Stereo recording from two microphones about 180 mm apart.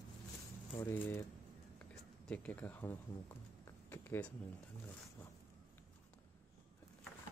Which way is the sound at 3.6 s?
10° left (ahead or behind).